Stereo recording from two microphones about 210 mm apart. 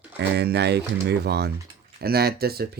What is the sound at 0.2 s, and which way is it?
Speech, 50° right (ahead or behind).